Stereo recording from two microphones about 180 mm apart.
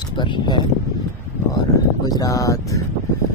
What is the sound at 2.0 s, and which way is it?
Speech, 20° left (ahead or behind).